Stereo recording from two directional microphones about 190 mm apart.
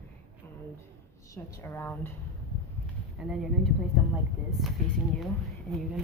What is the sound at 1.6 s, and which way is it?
Speech, 10° left (ahead or behind).